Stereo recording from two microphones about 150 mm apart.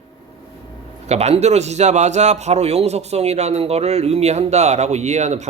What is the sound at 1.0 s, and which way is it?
A man's voice, 45° right (ahead or behind).